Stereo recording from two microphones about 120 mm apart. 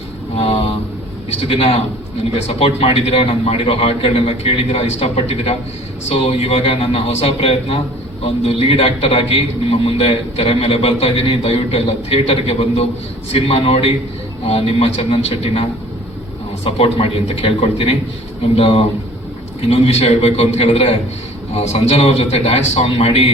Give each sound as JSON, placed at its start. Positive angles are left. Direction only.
{"t": 0.3, "sound": "a sound", "side_deg": 50}
{"t": 1.3, "sound": "a man's voice", "side_deg": 55}
{"t": 16.6, "sound": "a man's voice", "side_deg": 50}